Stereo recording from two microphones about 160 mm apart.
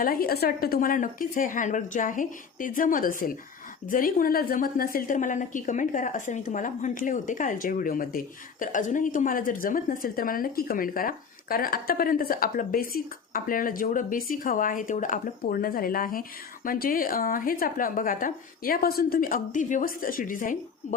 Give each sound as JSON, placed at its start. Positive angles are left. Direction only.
{"t": 0.0, "sound": "a woman's voice", "side_deg": 65}